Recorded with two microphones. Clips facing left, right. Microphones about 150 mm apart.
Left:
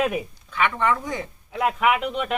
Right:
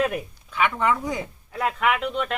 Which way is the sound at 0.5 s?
5° right (ahead or behind).